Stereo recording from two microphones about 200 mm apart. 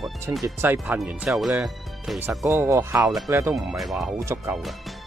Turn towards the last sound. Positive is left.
turn(degrees=-15)  # may be behind; listen again after turning